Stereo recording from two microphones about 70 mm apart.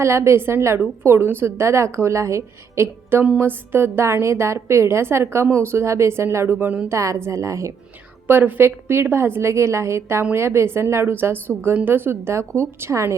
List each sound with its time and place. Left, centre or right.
0.0 s a woman's voice: right
6.9 s a woman's voice: right
8.3 s a woman's voice: right